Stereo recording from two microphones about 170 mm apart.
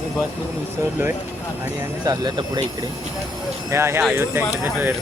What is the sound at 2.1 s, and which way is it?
Speech, 25° right (ahead or behind).